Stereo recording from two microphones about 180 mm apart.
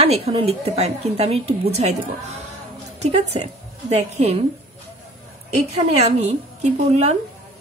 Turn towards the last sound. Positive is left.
turn(degrees=-40)  # may be behind; listen again after turning